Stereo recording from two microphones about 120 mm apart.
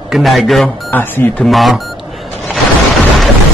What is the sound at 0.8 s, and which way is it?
Speech, 15° left (ahead or behind).